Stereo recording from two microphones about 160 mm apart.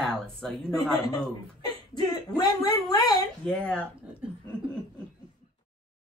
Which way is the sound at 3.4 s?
5° left (ahead or behind).